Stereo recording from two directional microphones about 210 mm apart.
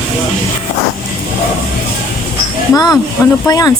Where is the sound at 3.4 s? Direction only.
15° left (ahead or behind).